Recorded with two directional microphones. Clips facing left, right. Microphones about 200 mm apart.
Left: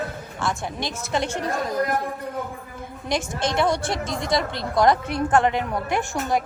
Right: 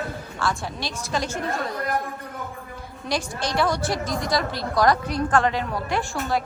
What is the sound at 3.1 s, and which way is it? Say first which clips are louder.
A woman's voice: left 2 dB; 20° left (ahead or behind).